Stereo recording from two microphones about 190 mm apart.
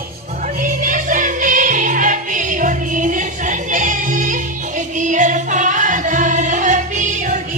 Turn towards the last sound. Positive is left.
turn(degrees=-40)  # may be behind; listen again after turning